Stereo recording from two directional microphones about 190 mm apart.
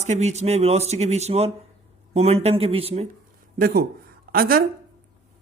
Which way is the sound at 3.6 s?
50° right (ahead or behind).